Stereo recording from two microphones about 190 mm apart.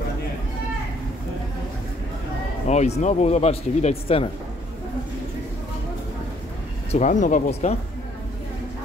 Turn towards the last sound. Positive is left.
turn(degrees=35)  # may be behind; listen again after turning